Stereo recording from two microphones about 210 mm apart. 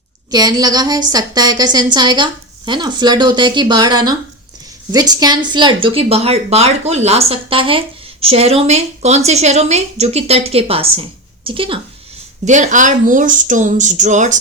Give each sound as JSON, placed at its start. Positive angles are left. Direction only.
{"t": 0.3, "sound": "speech", "side_deg": -20}
{"t": 12.5, "sound": "speech", "side_deg": -35}